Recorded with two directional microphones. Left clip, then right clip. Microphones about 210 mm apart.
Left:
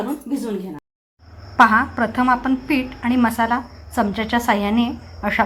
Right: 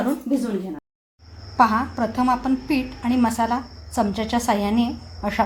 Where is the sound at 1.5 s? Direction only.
10° left (ahead or behind).